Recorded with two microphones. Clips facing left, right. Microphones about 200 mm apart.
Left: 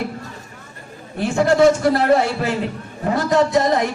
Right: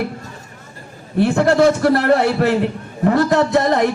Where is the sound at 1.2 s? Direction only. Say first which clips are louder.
Right 1 dB; 60° right (ahead or behind).